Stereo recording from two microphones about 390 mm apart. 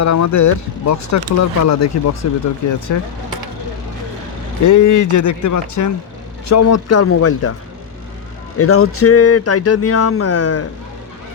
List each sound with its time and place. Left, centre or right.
0.0 s speech: left
4.6 s speech: left
8.5 s speech: left